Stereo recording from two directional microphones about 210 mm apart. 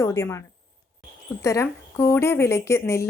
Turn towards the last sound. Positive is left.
turn(degrees=15)  # may be behind; listen again after turning